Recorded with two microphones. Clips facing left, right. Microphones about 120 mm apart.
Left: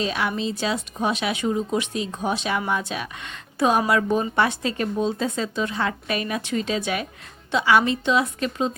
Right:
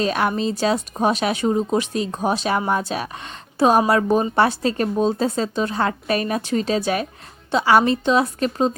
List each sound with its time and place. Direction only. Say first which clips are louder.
0.0 s speech: right 4 dB; 45° right (ahead or behind)